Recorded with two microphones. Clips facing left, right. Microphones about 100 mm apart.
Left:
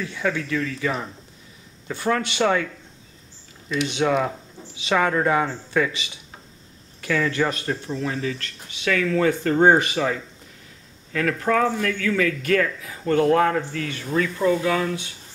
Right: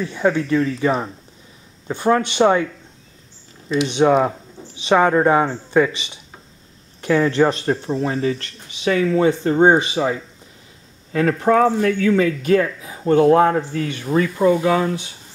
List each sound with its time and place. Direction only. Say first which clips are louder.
0.0 s speech: right 7 dB; 30° right (ahead or behind)